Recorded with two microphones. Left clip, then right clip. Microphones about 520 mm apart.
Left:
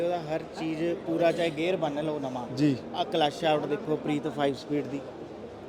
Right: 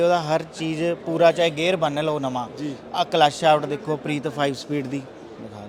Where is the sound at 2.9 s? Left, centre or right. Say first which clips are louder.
Right 8 dB; right.